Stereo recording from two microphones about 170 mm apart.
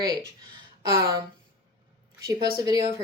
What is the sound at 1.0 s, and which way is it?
Speech, 25° right (ahead or behind).